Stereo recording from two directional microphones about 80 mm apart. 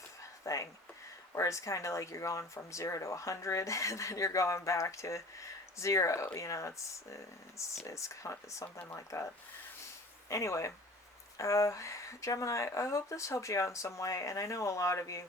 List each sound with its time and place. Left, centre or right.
0.4 s speech: left